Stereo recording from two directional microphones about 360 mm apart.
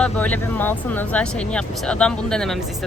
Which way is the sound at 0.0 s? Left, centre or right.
Centre.